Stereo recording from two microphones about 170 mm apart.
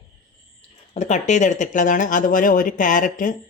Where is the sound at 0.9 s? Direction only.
45° left (ahead or behind).